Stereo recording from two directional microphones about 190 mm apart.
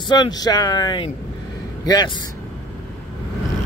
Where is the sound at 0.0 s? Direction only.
20° left (ahead or behind).